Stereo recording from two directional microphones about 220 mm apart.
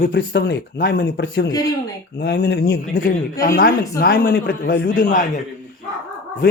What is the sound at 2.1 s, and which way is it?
Speech, 45° left (ahead or behind).